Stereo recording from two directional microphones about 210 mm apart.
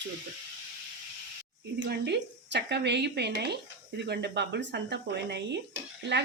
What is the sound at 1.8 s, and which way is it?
A woman's voice, 55° right (ahead or behind).